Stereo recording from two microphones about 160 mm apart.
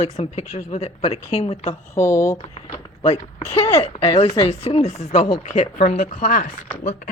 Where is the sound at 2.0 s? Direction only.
20° left (ahead or behind).